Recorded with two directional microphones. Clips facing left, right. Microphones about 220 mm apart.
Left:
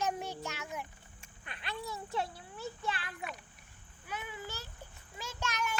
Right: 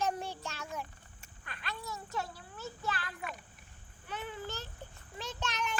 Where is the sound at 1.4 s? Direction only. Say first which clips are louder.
Left 2 dB; 20° left (ahead or behind).